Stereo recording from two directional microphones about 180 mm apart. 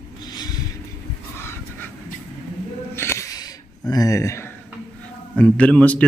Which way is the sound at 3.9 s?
20° left (ahead or behind).